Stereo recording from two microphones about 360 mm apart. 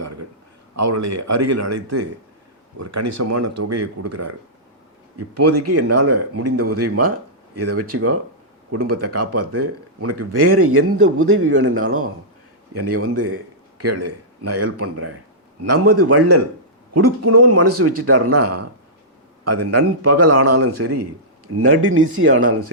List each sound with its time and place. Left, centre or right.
0.8 s speech: right
5.4 s a man's voice: right